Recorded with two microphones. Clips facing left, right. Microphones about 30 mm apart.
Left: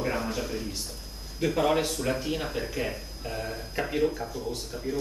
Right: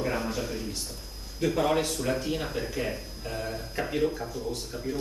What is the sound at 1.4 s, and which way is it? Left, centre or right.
Speech, centre.